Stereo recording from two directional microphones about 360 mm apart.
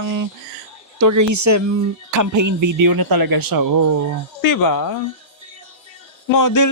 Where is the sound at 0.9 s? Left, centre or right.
Right.